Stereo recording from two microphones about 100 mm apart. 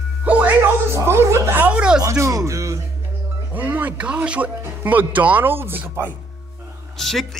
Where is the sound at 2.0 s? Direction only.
30° right (ahead or behind).